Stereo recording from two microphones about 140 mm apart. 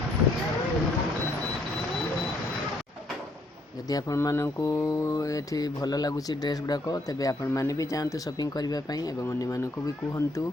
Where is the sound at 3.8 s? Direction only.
25° left (ahead or behind).